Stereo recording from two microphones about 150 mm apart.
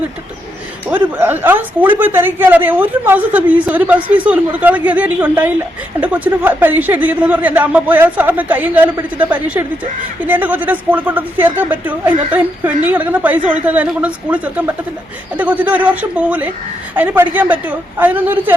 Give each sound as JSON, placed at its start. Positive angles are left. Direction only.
{"t": 0.9, "sound": "speech", "side_deg": -10}